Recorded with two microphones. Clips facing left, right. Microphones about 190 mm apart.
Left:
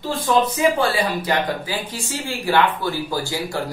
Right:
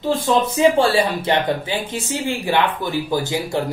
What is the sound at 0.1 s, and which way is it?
Speech, 25° right (ahead or behind).